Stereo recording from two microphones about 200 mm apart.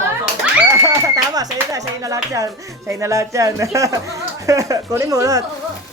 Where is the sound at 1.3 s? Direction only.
15° right (ahead or behind).